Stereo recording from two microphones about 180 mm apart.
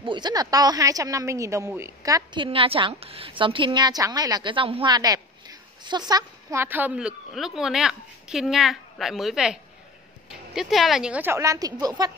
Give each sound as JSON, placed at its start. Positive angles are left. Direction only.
{"t": 0.0, "sound": "a woman's voice", "side_deg": -25}